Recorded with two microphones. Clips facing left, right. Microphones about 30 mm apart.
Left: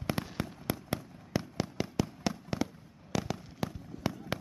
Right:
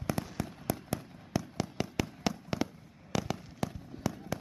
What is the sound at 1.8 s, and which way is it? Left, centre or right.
Fireworks, centre.